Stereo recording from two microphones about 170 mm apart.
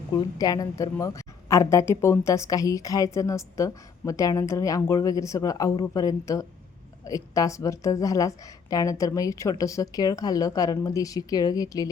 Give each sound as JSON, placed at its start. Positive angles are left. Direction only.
{"t": 0.1, "sound": "a woman's voice", "side_deg": 20}